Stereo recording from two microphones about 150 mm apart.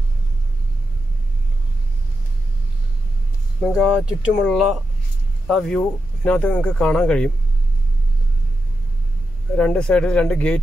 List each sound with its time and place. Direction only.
3.6 s speech: 5° right (ahead or behind)
5.5 s speech: centre (ahead or behind)
9.6 s speech: 5° left (ahead or behind)